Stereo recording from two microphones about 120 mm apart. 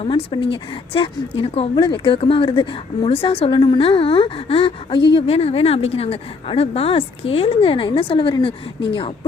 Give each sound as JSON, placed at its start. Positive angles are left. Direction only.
{"t": 0.0, "sound": "a woman's voice", "side_deg": 50}
{"t": 1.7, "sound": "a woman's voice", "side_deg": 45}